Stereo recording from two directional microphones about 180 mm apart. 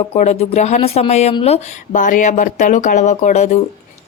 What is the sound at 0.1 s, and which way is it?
Speech, 35° left (ahead or behind).